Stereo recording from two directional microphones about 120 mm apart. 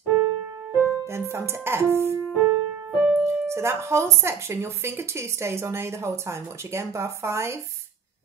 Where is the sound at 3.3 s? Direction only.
20° right (ahead or behind).